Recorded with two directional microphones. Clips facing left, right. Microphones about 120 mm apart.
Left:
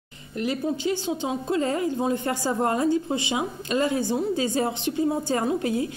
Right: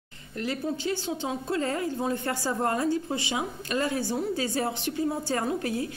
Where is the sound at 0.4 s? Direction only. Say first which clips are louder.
Left 4 dB; 15° left (ahead or behind).